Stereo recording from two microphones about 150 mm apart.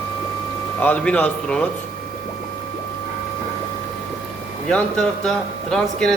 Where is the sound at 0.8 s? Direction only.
10° left (ahead or behind).